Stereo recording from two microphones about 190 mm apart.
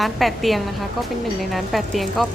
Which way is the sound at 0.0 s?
Centre (ahead or behind).